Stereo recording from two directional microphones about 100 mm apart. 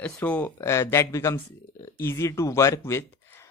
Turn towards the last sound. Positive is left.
turn(degrees=25)  # may be behind; listen again after turning